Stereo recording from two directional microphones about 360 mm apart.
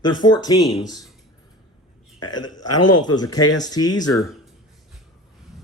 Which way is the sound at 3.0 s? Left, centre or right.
Centre.